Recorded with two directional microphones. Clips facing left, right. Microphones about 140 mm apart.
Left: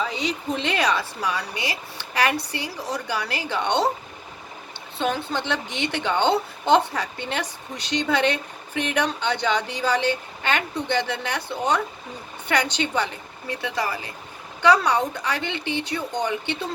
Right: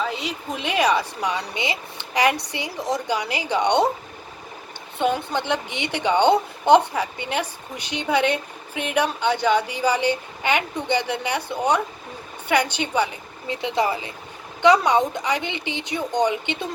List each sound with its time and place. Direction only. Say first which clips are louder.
0.0 s a woman's voice: left 1 dB; 5° right (ahead or behind)
4.9 s a woman's voice: right 3 dB; 15° right (ahead or behind)